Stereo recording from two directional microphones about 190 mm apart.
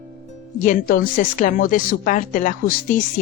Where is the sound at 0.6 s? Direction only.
45° left (ahead or behind).